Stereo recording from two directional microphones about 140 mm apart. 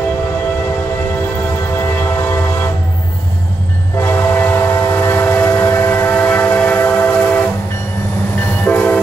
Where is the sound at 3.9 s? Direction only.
15° left (ahead or behind).